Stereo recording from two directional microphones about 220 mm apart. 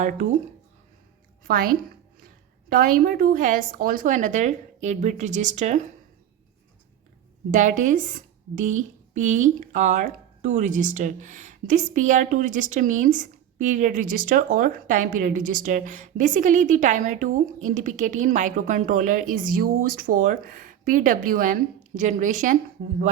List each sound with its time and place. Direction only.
0.0 s a woman's voice: 35° right (ahead or behind)
1.5 s a woman's voice: 40° right (ahead or behind)
7.5 s a woman's voice: 35° right (ahead or behind)